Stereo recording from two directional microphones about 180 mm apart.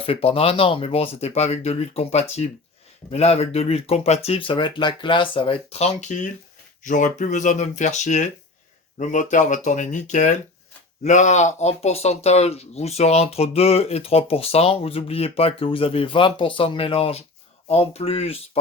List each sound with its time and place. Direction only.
0.0 s speech: 30° left (ahead or behind)